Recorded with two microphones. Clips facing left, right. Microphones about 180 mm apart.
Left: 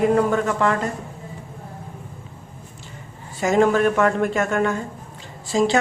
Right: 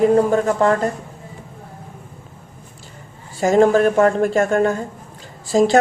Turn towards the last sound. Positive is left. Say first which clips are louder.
# right 5 dB
turn(degrees=-40)  # may be behind; listen again after turning